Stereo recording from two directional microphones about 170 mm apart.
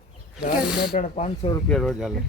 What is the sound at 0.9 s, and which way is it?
Speech, 45° left (ahead or behind).